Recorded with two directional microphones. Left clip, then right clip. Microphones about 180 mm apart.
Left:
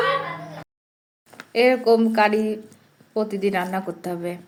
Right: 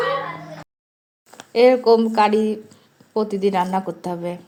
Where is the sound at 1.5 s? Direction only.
30° right (ahead or behind).